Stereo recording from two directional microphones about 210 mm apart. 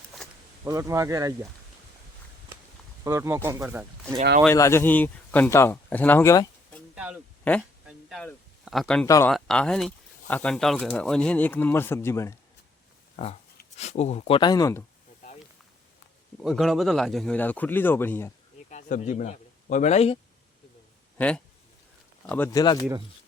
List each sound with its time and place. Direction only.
0.6 s speech: 15° right (ahead or behind)
3.0 s speech: 15° right (ahead or behind)
4.4 s speech: 15° left (ahead or behind)
6.9 s a sound: 5° right (ahead or behind)
7.5 s speech: 5° left (ahead or behind)
7.9 s a sound: centre (ahead or behind)
9.0 s speech: 15° left (ahead or behind)
9.3 s speech: 5° left (ahead or behind)
13.7 s speech: 30° left (ahead or behind); by 14.8 s 15° left (ahead or behind)
16.4 s speech: centre (ahead or behind)
18.7 s speech: 35° left (ahead or behind)
21.2 s speech: 5° left (ahead or behind)